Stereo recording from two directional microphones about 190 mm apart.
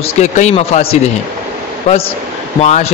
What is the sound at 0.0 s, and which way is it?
Speech, 35° left (ahead or behind).